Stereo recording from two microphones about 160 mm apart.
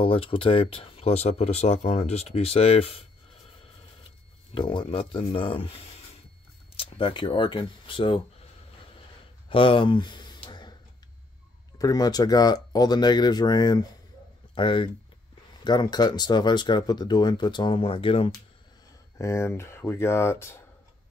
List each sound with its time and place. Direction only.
0.0 s speech: 35° left (ahead or behind)
4.6 s speech: 30° left (ahead or behind)
6.8 s speech: 35° left (ahead or behind)
9.5 s a sound: 35° left (ahead or behind)
11.8 s speech: 25° left (ahead or behind)
19.1 s speech: 15° left (ahead or behind)